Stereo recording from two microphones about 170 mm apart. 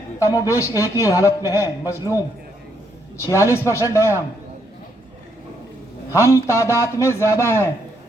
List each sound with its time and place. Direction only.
0.2 s a man's voice: 20° left (ahead or behind)
6.1 s a man's voice: 15° left (ahead or behind)